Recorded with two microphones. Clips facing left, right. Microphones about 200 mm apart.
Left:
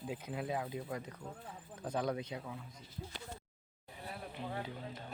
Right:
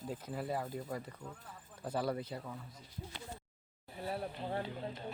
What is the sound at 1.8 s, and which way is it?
Speech, 5° right (ahead or behind).